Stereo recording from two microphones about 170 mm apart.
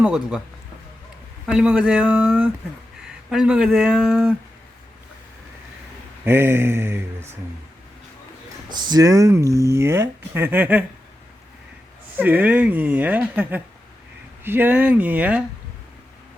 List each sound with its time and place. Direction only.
0.0 s speech: 5° right (ahead or behind)
1.5 s speech: 5° right (ahead or behind)
6.2 s speech: 15° right (ahead or behind)
8.7 s speech: 25° right (ahead or behind)
12.1 s speech: 10° right (ahead or behind)